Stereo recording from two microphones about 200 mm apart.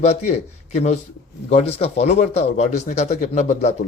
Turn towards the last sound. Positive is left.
turn(degrees=35)  # may be behind; listen again after turning